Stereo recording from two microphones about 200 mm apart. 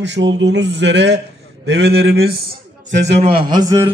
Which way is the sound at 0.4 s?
60° right (ahead or behind).